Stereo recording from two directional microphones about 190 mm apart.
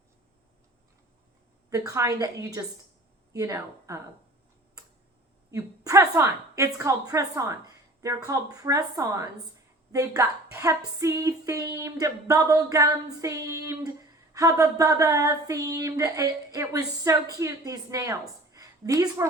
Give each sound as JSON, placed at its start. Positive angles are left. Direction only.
{"t": 1.7, "sound": "speech", "side_deg": -15}
{"t": 5.5, "sound": "speech", "side_deg": -15}